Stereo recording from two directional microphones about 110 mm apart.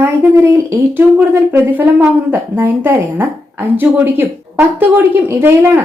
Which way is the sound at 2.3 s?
20° right (ahead or behind).